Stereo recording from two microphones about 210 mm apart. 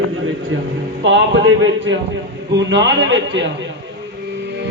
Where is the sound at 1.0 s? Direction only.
65° right (ahead or behind).